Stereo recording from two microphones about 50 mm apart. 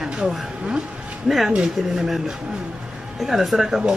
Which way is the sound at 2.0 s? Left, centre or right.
Centre.